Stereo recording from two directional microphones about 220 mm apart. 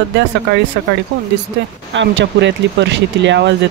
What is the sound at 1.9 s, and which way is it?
Speech, 55° right (ahead or behind).